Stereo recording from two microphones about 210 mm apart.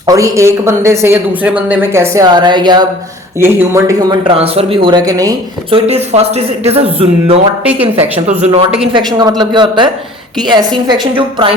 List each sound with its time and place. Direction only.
0.0 s speech: 15° right (ahead or behind)
4.4 s speech: 30° right (ahead or behind)
5.7 s speech: 30° right (ahead or behind)